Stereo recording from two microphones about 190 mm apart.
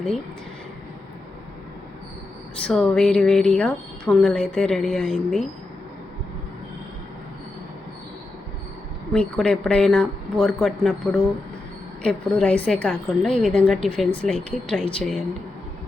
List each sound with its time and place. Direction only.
2.6 s a woman's voice: 5° left (ahead or behind)
9.1 s a woman's voice: 5° left (ahead or behind)